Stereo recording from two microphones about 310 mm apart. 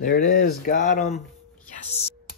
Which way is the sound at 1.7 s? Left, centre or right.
Left.